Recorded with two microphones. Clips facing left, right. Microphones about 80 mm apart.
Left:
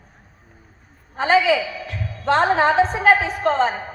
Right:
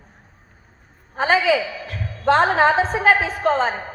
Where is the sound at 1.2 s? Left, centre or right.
Right.